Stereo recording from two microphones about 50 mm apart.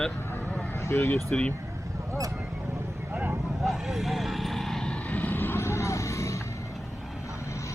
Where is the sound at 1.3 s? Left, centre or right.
Left.